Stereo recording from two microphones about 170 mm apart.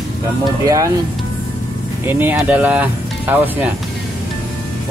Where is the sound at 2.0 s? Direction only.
10° right (ahead or behind).